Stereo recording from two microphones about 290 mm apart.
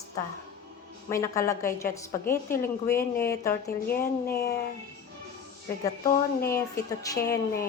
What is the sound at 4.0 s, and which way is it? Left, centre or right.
Speech, left.